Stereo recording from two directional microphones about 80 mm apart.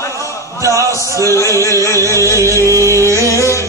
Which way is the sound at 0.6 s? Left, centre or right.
Right.